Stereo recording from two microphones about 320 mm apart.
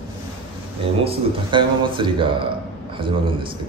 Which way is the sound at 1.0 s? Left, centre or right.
Centre.